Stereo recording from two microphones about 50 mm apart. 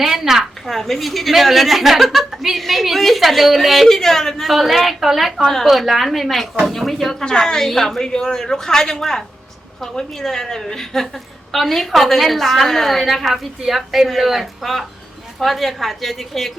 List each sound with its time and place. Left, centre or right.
0.0 s a woman's voice: centre